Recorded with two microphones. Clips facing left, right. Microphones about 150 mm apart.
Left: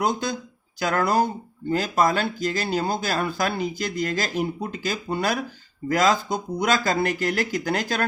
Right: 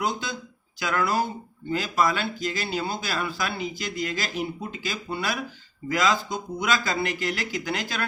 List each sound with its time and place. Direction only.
0.0 s speech: 45° left (ahead or behind)